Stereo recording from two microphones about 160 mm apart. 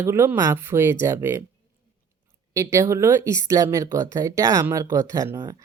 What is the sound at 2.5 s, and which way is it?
Speech, 20° right (ahead or behind).